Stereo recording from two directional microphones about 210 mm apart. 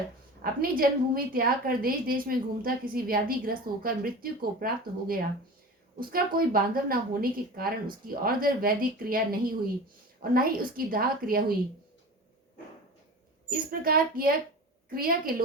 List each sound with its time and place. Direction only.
0.4 s a woman's voice: 45° right (ahead or behind)
13.5 s a woman's voice: 45° right (ahead or behind)